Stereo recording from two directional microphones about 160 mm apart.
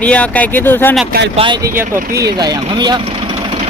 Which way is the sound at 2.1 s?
25° right (ahead or behind).